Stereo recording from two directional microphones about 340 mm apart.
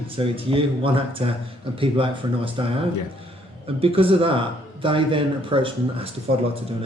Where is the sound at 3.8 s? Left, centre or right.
Centre.